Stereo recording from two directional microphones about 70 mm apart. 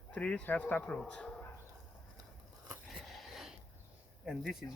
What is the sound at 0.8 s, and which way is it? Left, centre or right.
Speech, centre.